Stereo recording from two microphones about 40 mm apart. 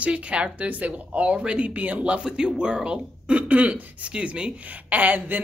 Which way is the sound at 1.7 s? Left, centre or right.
Right.